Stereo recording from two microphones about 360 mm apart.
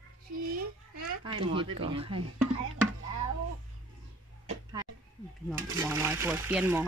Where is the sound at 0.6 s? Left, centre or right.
Right.